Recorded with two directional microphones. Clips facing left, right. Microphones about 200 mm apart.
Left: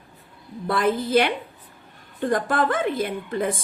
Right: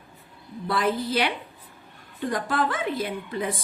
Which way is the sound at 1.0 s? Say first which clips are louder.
Left 6 dB; 50° left (ahead or behind).